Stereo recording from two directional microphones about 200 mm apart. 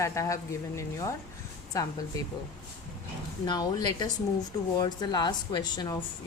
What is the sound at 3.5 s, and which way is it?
A woman's voice, 20° left (ahead or behind).